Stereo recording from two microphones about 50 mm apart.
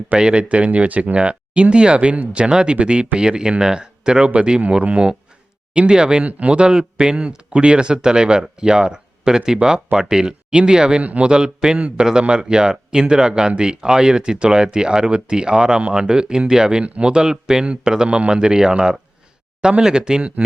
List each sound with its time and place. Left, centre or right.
0.2 s speech: centre
0.4 s speech: right